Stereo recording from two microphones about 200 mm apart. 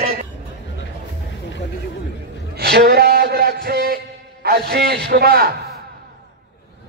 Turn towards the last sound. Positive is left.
turn(degrees=-50)  # may be behind; listen again after turning